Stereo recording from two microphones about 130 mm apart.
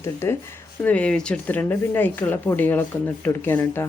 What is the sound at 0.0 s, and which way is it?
Speech, 20° left (ahead or behind).